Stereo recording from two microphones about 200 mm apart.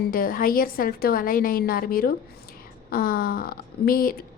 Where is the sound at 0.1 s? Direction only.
45° left (ahead or behind).